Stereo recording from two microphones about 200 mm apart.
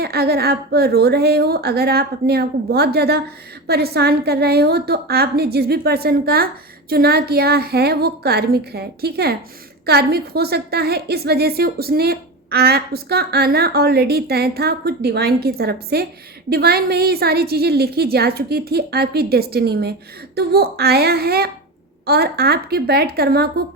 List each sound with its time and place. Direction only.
0.0 s a woman's voice: 50° right (ahead or behind)